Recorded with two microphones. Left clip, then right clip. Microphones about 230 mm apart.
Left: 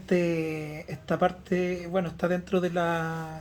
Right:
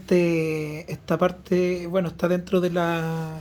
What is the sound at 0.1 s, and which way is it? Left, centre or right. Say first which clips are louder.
Speech: right 5 dB; right.